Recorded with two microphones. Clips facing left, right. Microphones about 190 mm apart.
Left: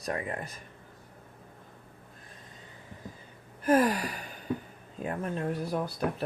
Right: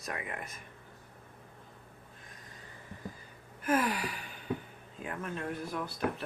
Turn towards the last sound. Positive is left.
turn(degrees=40)  # may be behind; listen again after turning